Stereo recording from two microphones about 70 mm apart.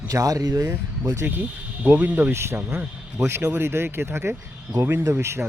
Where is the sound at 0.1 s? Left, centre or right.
Right.